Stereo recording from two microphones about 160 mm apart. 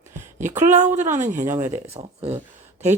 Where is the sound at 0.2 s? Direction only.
50° right (ahead or behind).